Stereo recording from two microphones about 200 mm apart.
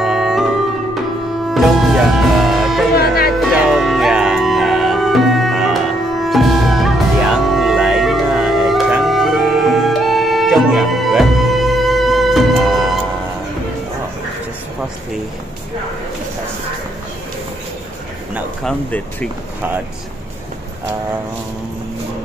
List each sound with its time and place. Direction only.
0.0 s music: centre (ahead or behind)
1.5 s music: centre (ahead or behind)
3.0 s music: 50° left (ahead or behind)
3.3 s music: centre (ahead or behind)
18.3 s a sound: 5° left (ahead or behind)